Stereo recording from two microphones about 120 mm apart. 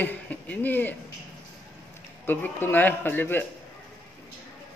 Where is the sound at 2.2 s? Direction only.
15° left (ahead or behind).